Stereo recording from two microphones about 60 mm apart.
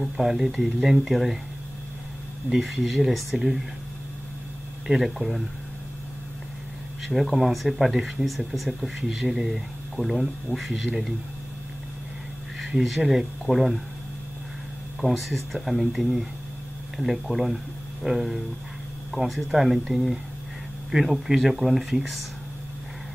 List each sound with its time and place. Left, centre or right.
0.0 s speech: centre
2.5 s speech: centre
4.8 s speech: centre
7.1 s speech: centre
12.7 s speech: centre
15.0 s speech: centre